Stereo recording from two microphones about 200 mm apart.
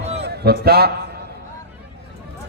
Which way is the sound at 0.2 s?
55° right (ahead or behind).